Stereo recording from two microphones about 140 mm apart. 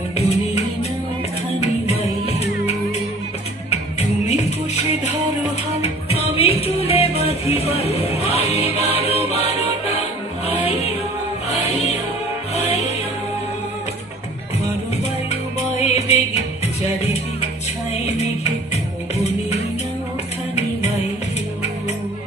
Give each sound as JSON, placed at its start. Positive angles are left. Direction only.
{"t": 0.2, "sound": "music", "side_deg": 50}
{"t": 15.8, "sound": "music", "side_deg": 50}